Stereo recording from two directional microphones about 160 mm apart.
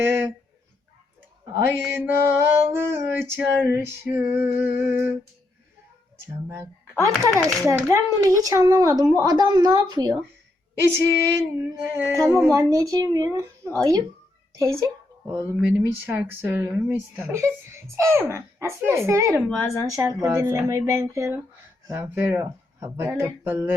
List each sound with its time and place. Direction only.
0.0 s speech: 15° right (ahead or behind)
1.5 s mantra: 15° right (ahead or behind)
6.1 s speech: 15° right (ahead or behind)
7.7 s speech: 20° right (ahead or behind)
10.8 s speech: 15° right (ahead or behind)
15.3 s speech: 20° right (ahead or behind)
16.4 s mantra: 15° right (ahead or behind)
19.8 s speech: 20° right (ahead or behind)
21.8 s mantra: 15° right (ahead or behind)